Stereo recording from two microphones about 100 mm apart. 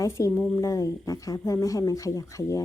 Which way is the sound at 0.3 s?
30° left (ahead or behind).